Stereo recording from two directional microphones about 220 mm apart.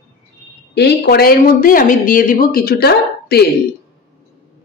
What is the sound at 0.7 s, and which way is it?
Speech, 50° left (ahead or behind).